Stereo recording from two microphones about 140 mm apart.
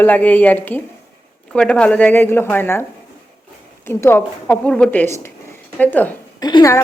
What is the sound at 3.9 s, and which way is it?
Speech, 15° left (ahead or behind).